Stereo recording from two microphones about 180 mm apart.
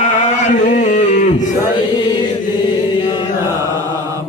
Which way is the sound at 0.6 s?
45° left (ahead or behind).